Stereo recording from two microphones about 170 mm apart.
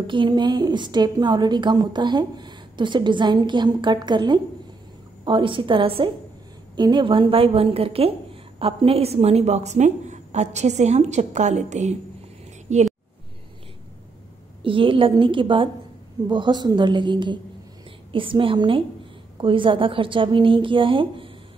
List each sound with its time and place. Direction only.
0.0 s a woman's voice: 30° right (ahead or behind); by 12.8 s 45° right (ahead or behind)
14.6 s a woman's voice: 30° right (ahead or behind)